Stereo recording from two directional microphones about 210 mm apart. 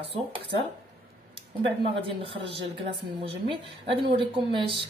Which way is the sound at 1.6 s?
25° right (ahead or behind).